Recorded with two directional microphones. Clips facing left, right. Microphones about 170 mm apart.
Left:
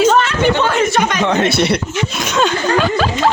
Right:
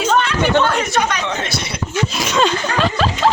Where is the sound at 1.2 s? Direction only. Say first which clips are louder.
Left 9 dB; 60° left (ahead or behind).